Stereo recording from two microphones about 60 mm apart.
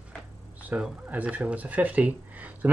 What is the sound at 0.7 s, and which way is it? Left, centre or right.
Speech, right.